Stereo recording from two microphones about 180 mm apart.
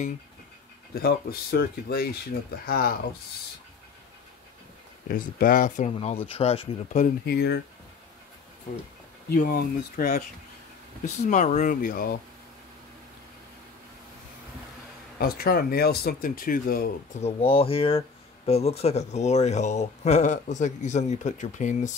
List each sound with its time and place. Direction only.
0.9 s speech: 60° left (ahead or behind)
5.0 s speech: 50° left (ahead or behind)
5.9 s speech: 30° left (ahead or behind)
7.2 s speech: 65° left (ahead or behind)
9.3 s speech: 55° left (ahead or behind)
11.2 s speech: 40° left (ahead or behind)
15.1 s speech: 60° left (ahead or behind)
17.2 s speech: 30° left (ahead or behind)